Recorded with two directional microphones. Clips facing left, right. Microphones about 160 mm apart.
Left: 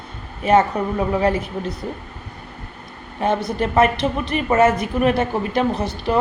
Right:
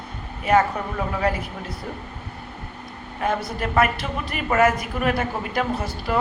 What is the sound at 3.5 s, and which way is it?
A woman's voice, 25° left (ahead or behind).